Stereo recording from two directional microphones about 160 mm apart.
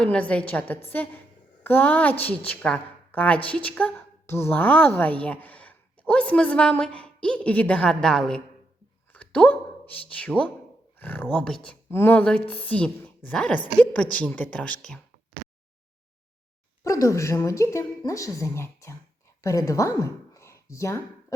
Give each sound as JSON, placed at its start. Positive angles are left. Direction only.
{"t": 0.0, "sound": "a woman's voice", "side_deg": 5}
{"t": 16.8, "sound": "a woman's voice", "side_deg": 20}